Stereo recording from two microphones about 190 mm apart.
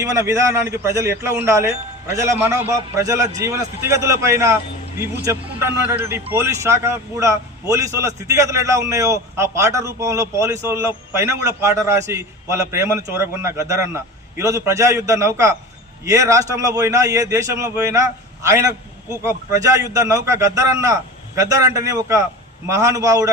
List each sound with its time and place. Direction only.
0.0 s a man's voice: 15° right (ahead or behind)